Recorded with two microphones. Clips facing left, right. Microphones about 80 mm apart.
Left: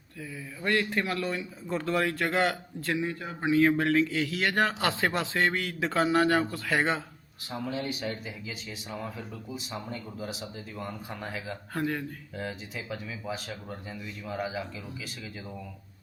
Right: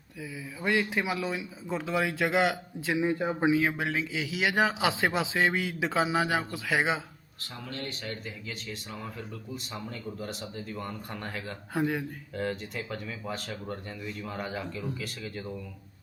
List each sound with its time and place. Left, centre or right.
0.2 s a man's voice: centre
2.9 s speech: right
3.5 s a man's voice: centre
7.5 s speech: centre
11.7 s a man's voice: centre
12.4 s speech: centre